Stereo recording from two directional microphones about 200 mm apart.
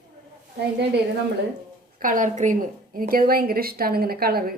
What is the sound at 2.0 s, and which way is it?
A woman's voice, 40° right (ahead or behind).